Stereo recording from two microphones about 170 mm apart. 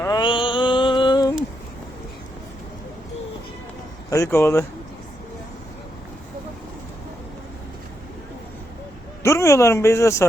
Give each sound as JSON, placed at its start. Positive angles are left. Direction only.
{"t": 0.0, "sound": "mantra", "side_deg": 25}
{"t": 4.1, "sound": "speech", "side_deg": 15}
{"t": 9.2, "sound": "speech", "side_deg": 15}